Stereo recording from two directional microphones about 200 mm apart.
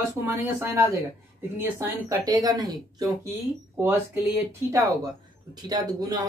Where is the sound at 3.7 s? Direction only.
10° right (ahead or behind).